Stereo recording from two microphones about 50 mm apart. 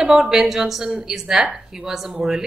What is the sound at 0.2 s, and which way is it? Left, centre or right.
A woman's voice, centre.